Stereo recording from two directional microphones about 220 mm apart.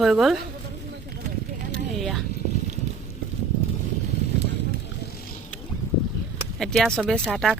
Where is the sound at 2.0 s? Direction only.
Centre (ahead or behind).